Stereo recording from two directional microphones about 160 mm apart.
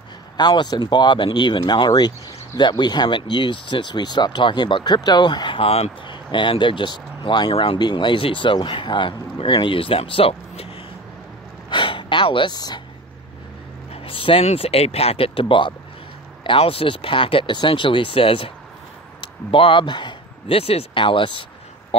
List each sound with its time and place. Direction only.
0.4 s speech: 25° left (ahead or behind)
11.7 s a sound: 30° left (ahead or behind)
13.9 s speech: 35° left (ahead or behind)